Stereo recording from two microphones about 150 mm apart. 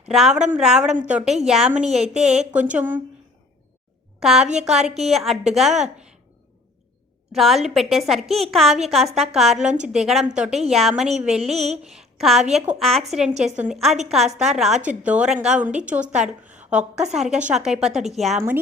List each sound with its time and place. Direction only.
0.1 s a woman's voice: 5° right (ahead or behind)
4.2 s a woman's voice: centre (ahead or behind)
7.3 s a woman's voice: centre (ahead or behind)
11.5 s a sound: 45° right (ahead or behind)
11.8 s a woman's voice: 5° right (ahead or behind)